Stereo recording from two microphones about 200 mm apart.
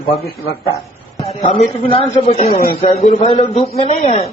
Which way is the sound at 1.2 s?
30° left (ahead or behind).